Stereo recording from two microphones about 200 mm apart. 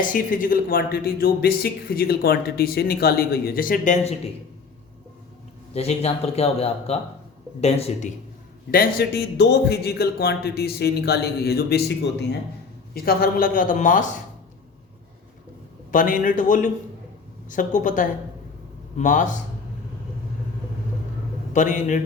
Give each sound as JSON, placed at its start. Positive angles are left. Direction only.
{"t": 0.0, "sound": "speech", "side_deg": 40}
{"t": 5.7, "sound": "speech", "side_deg": 30}
{"t": 8.7, "sound": "speech", "side_deg": 50}
{"t": 15.9, "sound": "speech", "side_deg": 40}
{"t": 21.5, "sound": "speech", "side_deg": 40}